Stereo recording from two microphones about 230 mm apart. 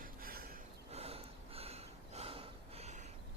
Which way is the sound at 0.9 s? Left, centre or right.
Right.